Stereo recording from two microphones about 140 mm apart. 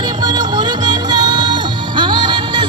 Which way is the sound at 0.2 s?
30° right (ahead or behind).